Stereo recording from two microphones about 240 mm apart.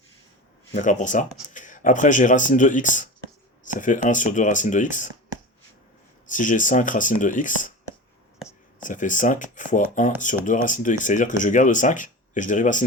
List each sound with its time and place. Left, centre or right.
0.7 s speech: left
6.2 s speech: left
8.8 s speech: left